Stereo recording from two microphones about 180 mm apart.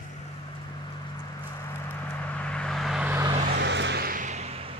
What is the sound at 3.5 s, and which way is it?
Vehicle, 75° right (ahead or behind).